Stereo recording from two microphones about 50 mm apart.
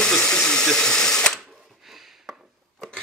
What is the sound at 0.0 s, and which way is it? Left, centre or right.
Ratchet, centre.